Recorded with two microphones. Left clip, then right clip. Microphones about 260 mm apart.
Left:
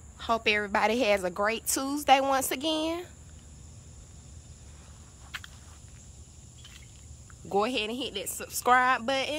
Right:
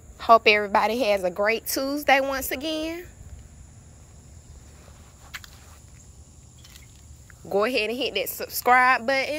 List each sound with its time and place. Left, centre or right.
0.2 s a woman's voice: centre
5.3 s walk: right
7.4 s a woman's voice: centre